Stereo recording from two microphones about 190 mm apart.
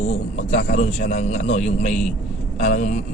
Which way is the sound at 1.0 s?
40° left (ahead or behind).